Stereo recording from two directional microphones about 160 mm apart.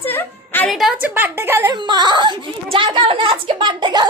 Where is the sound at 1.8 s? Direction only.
25° right (ahead or behind).